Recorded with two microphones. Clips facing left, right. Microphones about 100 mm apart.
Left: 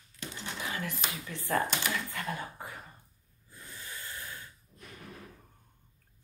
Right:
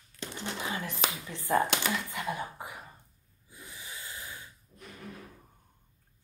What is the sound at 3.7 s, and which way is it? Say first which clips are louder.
Snort: left 1 dB; 15° right (ahead or behind).